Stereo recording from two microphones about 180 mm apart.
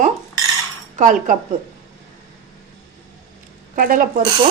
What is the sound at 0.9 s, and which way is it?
Speech, 45° right (ahead or behind).